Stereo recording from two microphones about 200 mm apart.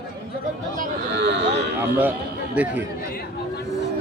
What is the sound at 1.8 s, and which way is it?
A man's voice, 10° right (ahead or behind).